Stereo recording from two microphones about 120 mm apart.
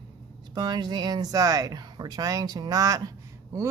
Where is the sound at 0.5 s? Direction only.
35° right (ahead or behind).